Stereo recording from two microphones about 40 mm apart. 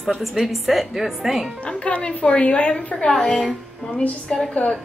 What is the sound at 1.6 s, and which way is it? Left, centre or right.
A woman's voice, left.